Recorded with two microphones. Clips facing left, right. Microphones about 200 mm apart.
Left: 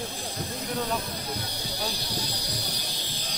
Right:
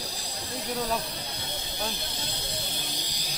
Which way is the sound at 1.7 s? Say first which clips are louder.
Left 2 dB; 20° right (ahead or behind).